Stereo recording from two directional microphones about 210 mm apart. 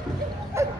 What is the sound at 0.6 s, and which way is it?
Bow-wow, 15° right (ahead or behind).